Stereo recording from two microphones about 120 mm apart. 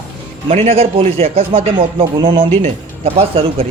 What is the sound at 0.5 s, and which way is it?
Speech, 60° right (ahead or behind).